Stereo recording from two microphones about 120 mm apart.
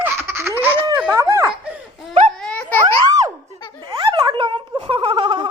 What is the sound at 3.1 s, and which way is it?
Speech, 30° right (ahead or behind).